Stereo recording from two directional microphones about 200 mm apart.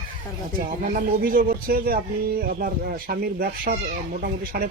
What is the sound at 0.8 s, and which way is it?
A man's voice, 45° right (ahead or behind).